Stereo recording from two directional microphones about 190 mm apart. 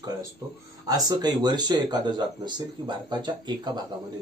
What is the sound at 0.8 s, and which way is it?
A man's voice, 20° right (ahead or behind).